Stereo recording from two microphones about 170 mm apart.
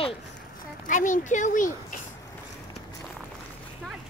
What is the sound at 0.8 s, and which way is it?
Speech, 50° left (ahead or behind).